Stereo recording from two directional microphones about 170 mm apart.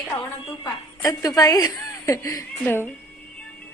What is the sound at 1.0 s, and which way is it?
A woman's voice, 20° left (ahead or behind).